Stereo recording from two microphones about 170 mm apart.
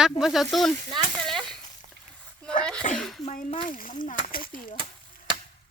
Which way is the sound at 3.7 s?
50° left (ahead or behind).